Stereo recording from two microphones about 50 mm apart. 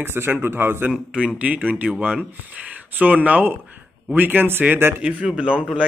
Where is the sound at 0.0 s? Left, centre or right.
Right.